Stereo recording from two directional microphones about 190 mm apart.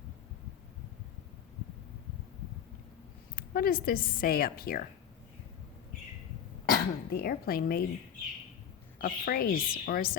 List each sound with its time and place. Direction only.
3.3 s a woman's voice: 50° left (ahead or behind)
6.7 s speech: 50° left (ahead or behind)
9.0 s a woman's voice: 50° left (ahead or behind)